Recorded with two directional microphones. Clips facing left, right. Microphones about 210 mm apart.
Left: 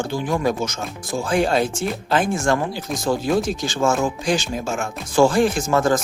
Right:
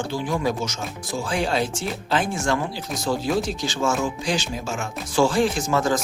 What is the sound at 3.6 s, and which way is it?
Speech, 50° left (ahead or behind).